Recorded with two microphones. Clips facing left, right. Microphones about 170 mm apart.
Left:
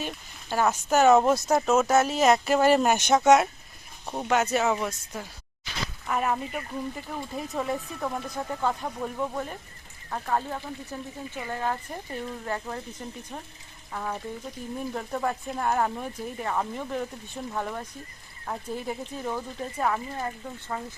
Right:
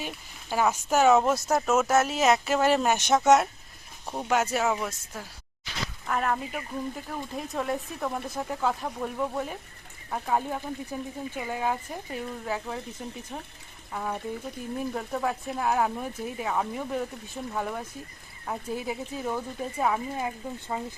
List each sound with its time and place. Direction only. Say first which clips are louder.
0.0 s speech: left 2 dB; 10° right (ahead or behind)